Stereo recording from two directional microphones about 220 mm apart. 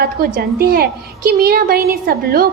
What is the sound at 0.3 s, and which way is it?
A woman's voice, 45° right (ahead or behind).